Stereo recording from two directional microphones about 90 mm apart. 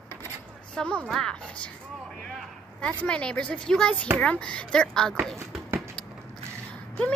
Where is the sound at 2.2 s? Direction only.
Centre (ahead or behind).